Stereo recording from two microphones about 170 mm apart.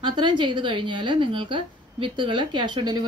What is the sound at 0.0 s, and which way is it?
A woman's voice, 25° right (ahead or behind).